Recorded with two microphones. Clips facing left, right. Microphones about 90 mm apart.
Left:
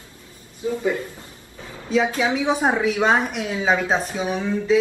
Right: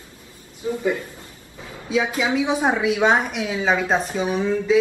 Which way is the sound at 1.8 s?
5° right (ahead or behind).